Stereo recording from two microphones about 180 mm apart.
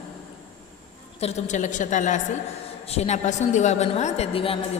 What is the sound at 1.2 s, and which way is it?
A woman's voice, 40° left (ahead or behind).